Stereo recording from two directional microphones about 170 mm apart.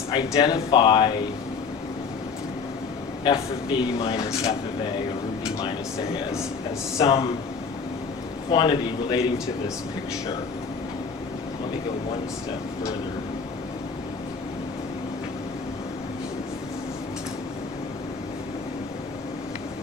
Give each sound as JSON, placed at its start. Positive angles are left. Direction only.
{"t": 0.1, "sound": "speech", "side_deg": 25}
{"t": 3.2, "sound": "speech", "side_deg": 30}
{"t": 4.2, "sound": "speech", "side_deg": 20}
{"t": 7.0, "sound": "speech", "side_deg": 35}
{"t": 8.4, "sound": "speech", "side_deg": 25}